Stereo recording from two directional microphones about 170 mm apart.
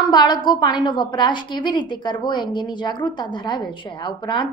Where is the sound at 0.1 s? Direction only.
25° left (ahead or behind).